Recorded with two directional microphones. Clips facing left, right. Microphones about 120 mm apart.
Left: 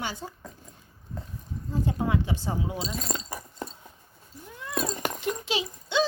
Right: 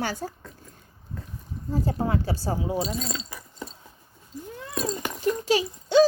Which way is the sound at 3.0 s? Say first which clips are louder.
Left 1 dB; 45° left (ahead or behind).